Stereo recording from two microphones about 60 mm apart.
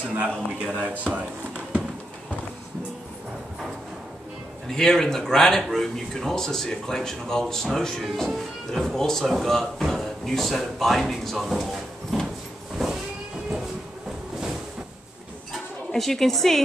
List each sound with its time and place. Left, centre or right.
0.1 s speech: right
4.6 s a man's voice: centre
12.7 s vehicle: centre
15.9 s speech: centre